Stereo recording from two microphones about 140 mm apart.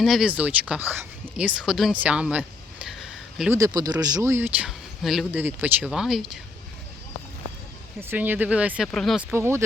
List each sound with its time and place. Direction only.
0.0 s speech: centre (ahead or behind)
4.0 s speech: 25° right (ahead or behind); by 5.4 s 5° right (ahead or behind)
5.4 s speech: 15° right (ahead or behind)
8.0 s speech: 15° right (ahead or behind)
8.9 s speech: 5° left (ahead or behind)
9.3 s speech: 15° right (ahead or behind)